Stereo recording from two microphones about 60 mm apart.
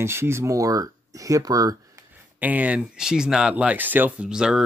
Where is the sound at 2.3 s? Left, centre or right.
Right.